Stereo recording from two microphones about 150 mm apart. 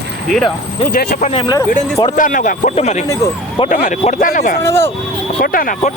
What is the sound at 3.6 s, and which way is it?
Speech, 60° left (ahead or behind).